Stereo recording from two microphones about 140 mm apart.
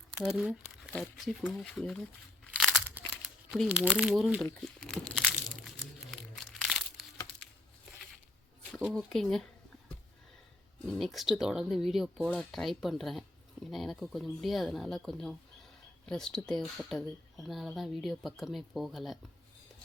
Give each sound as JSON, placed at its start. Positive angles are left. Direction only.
{"t": 0.1, "sound": "speech", "side_deg": -5}
{"t": 2.4, "sound": "crunch", "side_deg": 10}
{"t": 2.7, "sound": "crumpling", "side_deg": -5}
{"t": 3.7, "sound": "speech", "side_deg": -5}
{"t": 4.6, "sound": "crumpling", "side_deg": 5}
{"t": 8.8, "sound": "speech", "side_deg": 0}
{"t": 10.8, "sound": "speech", "side_deg": 0}